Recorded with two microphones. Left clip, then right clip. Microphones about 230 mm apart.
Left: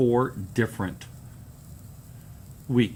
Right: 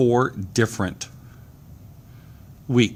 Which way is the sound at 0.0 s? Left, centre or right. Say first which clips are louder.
Right 4 dB; right.